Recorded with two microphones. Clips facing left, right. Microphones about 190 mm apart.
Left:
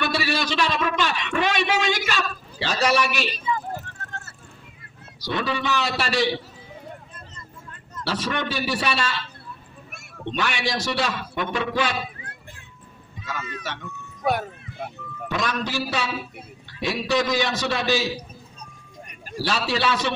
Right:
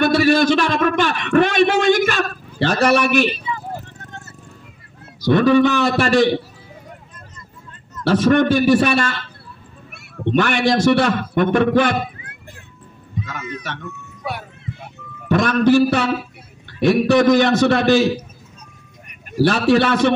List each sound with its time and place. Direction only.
0.0 s a man's voice: 50° right (ahead or behind)
5.2 s a man's voice: 50° right (ahead or behind)
8.0 s a man's voice: 50° right (ahead or behind)
13.2 s speech: 55° right (ahead or behind)
15.2 s a man's voice: 55° right (ahead or behind)
19.3 s a man's voice: 55° right (ahead or behind)